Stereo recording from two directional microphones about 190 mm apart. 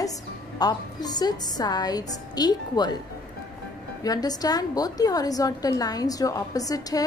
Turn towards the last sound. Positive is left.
turn(degrees=20)  # may be behind; listen again after turning